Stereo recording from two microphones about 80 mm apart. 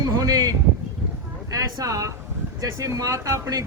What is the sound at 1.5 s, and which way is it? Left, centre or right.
Speech, right.